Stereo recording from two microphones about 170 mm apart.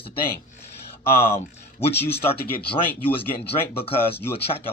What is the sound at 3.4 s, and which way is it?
Speech, 35° left (ahead or behind).